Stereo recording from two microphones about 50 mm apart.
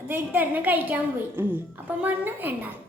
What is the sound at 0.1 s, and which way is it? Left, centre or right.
A woman's voice, right.